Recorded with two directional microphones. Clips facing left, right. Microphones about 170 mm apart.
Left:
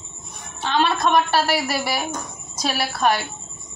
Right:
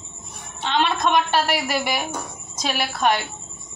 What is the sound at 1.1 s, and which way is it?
Speech, 35° left (ahead or behind).